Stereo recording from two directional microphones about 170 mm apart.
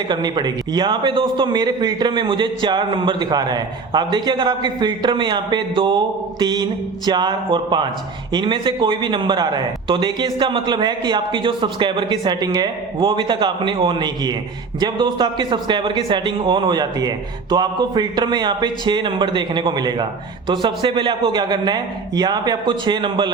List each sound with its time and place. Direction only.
0.1 s a man's voice: 25° right (ahead or behind)